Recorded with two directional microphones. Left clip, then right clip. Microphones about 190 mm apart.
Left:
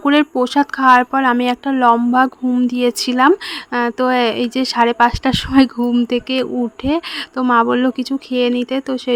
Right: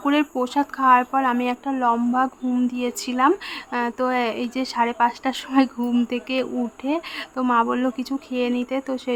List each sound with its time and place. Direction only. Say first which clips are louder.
0.0 s speech: left 7 dB; 30° left (ahead or behind)